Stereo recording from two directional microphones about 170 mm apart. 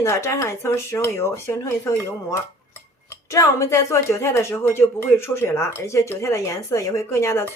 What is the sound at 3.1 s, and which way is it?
Speech, 15° left (ahead or behind).